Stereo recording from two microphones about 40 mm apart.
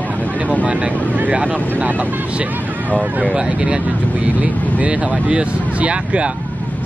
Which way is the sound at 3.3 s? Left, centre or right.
Right.